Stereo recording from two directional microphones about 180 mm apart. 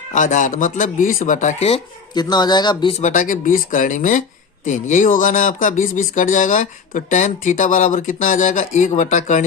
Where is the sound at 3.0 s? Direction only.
45° left (ahead or behind).